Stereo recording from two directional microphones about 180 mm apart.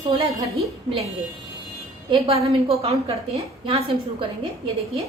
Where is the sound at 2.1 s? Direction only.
30° right (ahead or behind).